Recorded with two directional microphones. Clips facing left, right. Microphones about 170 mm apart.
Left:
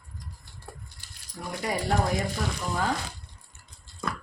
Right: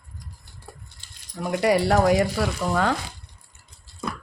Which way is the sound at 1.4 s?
85° right.